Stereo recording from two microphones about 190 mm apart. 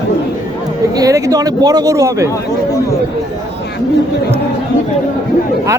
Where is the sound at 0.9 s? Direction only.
20° right (ahead or behind).